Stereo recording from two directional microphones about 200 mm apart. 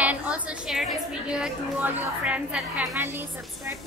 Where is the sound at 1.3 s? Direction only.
5° right (ahead or behind).